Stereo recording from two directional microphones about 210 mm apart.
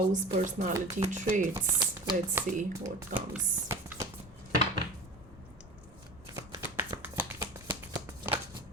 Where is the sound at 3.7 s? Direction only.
10° right (ahead or behind).